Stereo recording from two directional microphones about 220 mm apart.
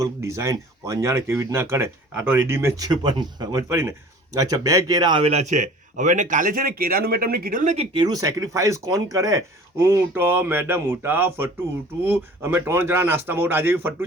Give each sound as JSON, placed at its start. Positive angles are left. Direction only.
{"t": 0.0, "sound": "speech", "side_deg": -15}